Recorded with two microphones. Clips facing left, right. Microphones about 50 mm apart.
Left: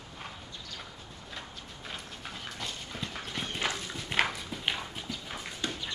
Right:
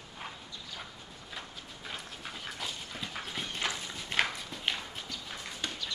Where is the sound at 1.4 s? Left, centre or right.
Centre.